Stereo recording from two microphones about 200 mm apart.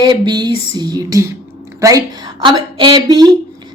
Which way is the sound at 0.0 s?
20° right (ahead or behind).